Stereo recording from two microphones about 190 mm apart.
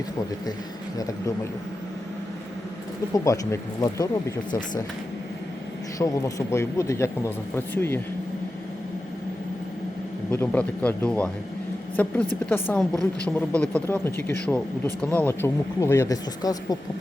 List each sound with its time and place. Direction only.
0.9 s speech: 20° left (ahead or behind)
3.1 s speech: 15° left (ahead or behind)
6.0 s speech: 15° left (ahead or behind)
10.3 s speech: 10° left (ahead or behind)